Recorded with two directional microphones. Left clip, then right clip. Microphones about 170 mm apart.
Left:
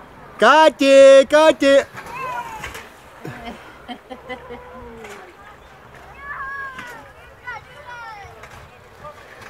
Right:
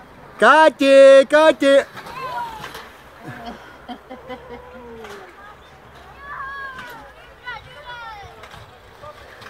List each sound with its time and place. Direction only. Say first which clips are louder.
0.4 s speech: even; centre (ahead or behind)
3.4 s a sound: even; 25° left (ahead or behind)
7.5 s vehicle: even; 5° left (ahead or behind)